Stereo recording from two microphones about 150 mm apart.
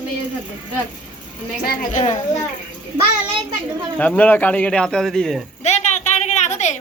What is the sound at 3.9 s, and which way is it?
Speech, 10° left (ahead or behind).